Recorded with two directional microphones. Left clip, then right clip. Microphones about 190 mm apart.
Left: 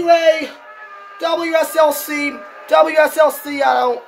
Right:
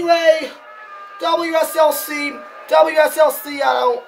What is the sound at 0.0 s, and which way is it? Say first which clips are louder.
A man's voice: left 1 dB; 10° left (ahead or behind).